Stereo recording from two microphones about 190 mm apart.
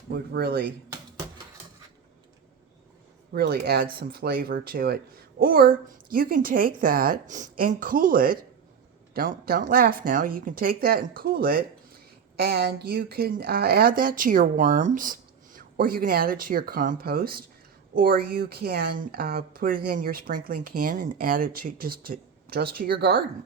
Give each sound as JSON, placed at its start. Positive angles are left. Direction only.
{"t": 0.1, "sound": "speech", "side_deg": -55}
{"t": 3.3, "sound": "a woman's voice", "side_deg": -55}